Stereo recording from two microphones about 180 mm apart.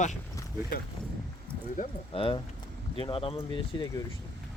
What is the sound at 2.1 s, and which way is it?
Speech, 30° left (ahead or behind).